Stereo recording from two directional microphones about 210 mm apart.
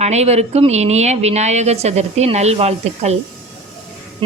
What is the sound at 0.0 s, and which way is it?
Speech, 30° right (ahead or behind).